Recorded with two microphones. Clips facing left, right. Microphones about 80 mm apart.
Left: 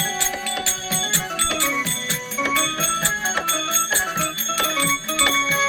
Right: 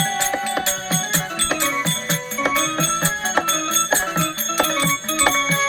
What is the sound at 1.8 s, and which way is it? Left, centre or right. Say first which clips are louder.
Music: right 3 dB; right.